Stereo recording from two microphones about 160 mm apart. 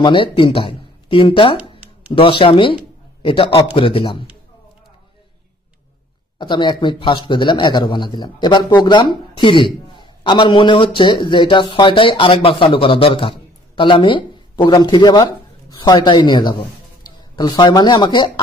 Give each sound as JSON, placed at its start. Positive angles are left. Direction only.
{"t": 0.0, "sound": "speech", "side_deg": 30}
{"t": 1.6, "sound": "a sound", "side_deg": -10}
{"t": 2.1, "sound": "a man's voice", "side_deg": 35}
{"t": 6.3, "sound": "a man's voice", "side_deg": 30}